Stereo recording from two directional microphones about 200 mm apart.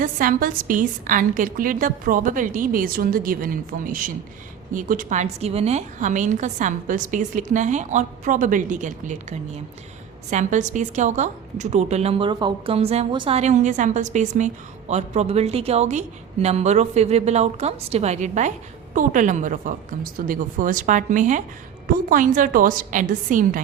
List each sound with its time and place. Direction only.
0.0 s a woman's voice: 45° right (ahead or behind)